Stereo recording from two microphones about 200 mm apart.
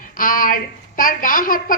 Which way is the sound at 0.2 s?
45° left (ahead or behind).